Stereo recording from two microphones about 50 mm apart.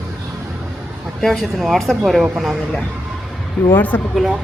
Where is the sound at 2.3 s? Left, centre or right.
Centre.